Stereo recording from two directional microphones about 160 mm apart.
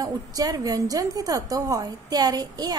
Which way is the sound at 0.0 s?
25° right (ahead or behind).